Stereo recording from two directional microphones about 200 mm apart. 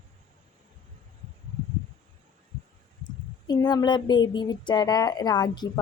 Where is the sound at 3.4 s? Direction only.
20° left (ahead or behind).